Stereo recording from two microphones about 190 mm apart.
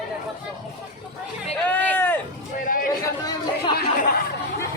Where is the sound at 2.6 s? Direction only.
45° left (ahead or behind).